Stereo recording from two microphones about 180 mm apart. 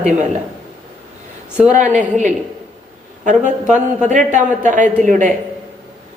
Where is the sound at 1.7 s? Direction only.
45° right (ahead or behind).